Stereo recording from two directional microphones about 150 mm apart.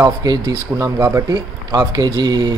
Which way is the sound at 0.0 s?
25° right (ahead or behind).